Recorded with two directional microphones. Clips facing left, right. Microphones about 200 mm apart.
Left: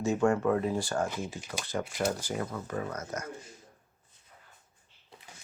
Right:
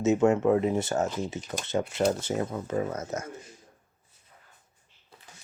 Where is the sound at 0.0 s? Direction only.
20° right (ahead or behind).